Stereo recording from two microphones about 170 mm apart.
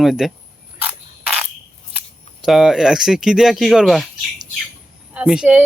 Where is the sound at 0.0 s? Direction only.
Centre (ahead or behind).